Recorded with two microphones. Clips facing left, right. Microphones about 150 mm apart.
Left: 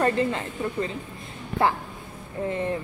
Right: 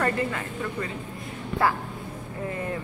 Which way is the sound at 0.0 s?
25° left (ahead or behind).